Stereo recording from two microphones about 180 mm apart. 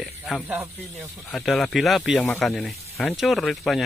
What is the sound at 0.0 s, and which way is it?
Speech, centre (ahead or behind).